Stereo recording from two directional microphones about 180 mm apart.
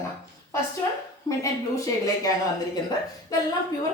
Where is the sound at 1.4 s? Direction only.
20° left (ahead or behind).